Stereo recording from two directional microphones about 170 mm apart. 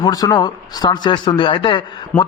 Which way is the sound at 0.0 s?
25° left (ahead or behind).